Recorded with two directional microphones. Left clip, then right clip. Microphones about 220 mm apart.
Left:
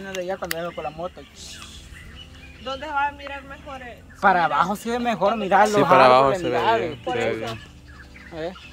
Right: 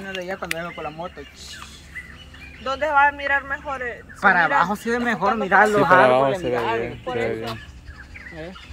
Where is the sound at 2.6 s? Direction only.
20° right (ahead or behind).